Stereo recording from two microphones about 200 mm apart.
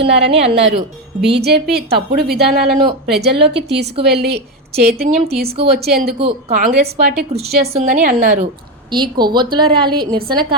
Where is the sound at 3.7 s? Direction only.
55° right (ahead or behind).